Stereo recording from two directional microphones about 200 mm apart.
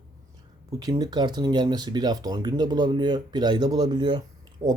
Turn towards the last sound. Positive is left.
turn(degrees=-20)  # may be behind; listen again after turning